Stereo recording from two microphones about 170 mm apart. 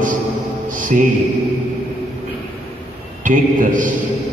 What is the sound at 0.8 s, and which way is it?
Speech, 50° right (ahead or behind).